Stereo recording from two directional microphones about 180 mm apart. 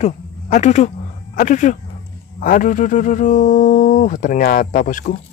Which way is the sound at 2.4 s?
50° left (ahead or behind).